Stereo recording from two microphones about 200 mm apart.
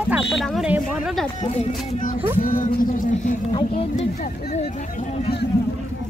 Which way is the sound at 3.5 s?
25° left (ahead or behind).